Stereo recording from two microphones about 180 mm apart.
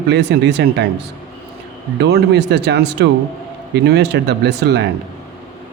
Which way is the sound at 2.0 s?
70° right (ahead or behind).